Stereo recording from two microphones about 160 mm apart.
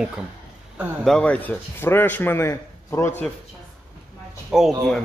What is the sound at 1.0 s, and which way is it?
A man's voice, 5° left (ahead or behind).